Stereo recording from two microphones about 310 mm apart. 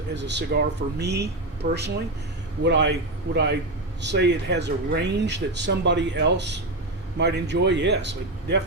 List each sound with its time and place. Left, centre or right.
0.1 s speech: right